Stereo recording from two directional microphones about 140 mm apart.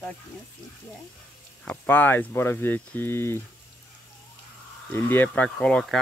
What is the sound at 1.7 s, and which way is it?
Speech, 10° left (ahead or behind).